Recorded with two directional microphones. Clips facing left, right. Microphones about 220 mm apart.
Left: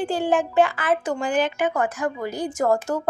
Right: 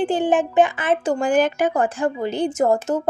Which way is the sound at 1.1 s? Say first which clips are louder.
Right 4 dB; 45° right (ahead or behind).